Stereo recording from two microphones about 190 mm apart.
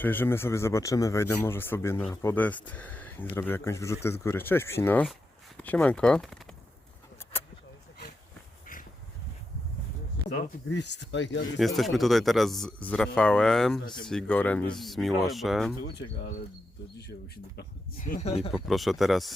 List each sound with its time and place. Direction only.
0.0 s speech: 10° left (ahead or behind)
8.6 s a sound: 45° left (ahead or behind)
10.8 s speech: 65° left (ahead or behind)
11.6 s speech: centre (ahead or behind)
17.0 s speech: 60° left (ahead or behind)
18.0 s speech: 40° left (ahead or behind)
18.5 s speech: centre (ahead or behind)